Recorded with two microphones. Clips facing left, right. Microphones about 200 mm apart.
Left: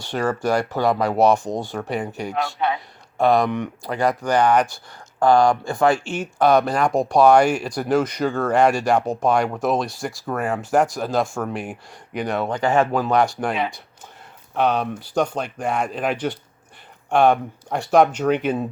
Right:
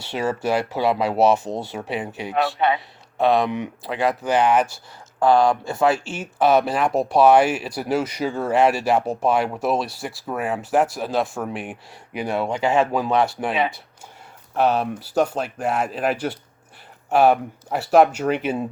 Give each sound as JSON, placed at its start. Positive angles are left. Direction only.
{"t": 0.0, "sound": "speech", "side_deg": -5}
{"t": 2.3, "sound": "speech", "side_deg": -20}
{"t": 3.2, "sound": "speech", "side_deg": 0}